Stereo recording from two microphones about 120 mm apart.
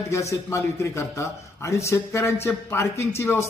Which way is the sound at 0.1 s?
25° left (ahead or behind).